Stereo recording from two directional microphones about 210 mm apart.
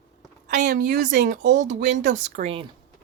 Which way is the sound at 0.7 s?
45° right (ahead or behind).